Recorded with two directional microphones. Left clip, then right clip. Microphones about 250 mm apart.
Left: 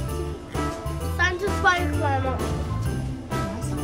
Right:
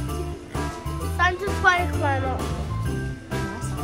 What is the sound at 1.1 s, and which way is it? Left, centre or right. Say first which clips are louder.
Music: right 1 dB; right.